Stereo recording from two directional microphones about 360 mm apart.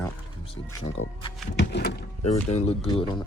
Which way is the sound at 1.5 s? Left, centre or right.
Left.